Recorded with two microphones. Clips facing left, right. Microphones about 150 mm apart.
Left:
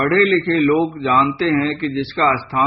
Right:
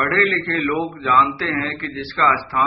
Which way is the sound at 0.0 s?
20° left (ahead or behind).